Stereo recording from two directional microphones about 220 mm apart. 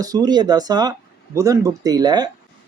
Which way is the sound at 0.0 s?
15° right (ahead or behind).